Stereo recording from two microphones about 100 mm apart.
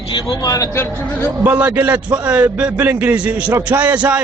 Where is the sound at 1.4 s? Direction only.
15° right (ahead or behind).